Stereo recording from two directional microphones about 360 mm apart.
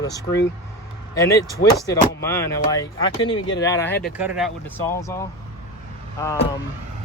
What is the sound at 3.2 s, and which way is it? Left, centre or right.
Speech, left.